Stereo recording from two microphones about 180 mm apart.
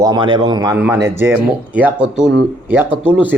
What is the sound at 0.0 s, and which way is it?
A man's voice, 25° right (ahead or behind).